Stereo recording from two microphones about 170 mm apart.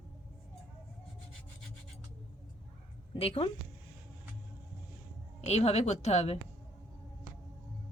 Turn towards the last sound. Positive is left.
turn(degrees=40)  # may be behind; listen again after turning